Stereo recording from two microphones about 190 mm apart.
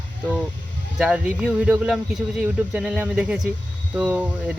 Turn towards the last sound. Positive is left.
turn(degrees=-10)  # may be behind; listen again after turning